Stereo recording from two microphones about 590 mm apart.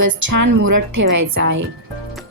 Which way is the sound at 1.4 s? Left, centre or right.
Centre.